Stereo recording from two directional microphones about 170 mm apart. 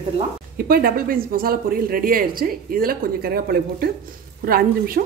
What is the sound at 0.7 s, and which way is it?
A woman's voice, 60° right (ahead or behind).